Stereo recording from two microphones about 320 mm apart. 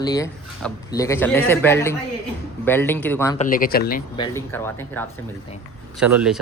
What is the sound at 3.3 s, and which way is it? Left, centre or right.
Speech, left.